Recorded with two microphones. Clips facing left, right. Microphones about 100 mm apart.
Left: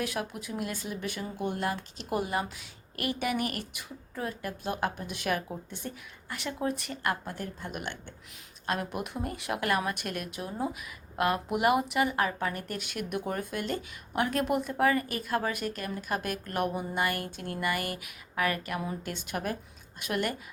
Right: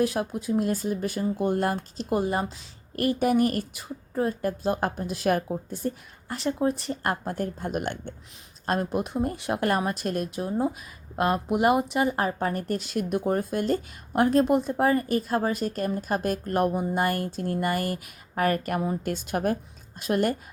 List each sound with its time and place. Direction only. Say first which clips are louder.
0.0 s speech: right 8 dB; 30° right (ahead or behind)
2.0 s speech: right 5 dB; 30° right (ahead or behind); by 8.1 s 45° right (ahead or behind)
8.6 s speech: right 6 dB; 35° right (ahead or behind)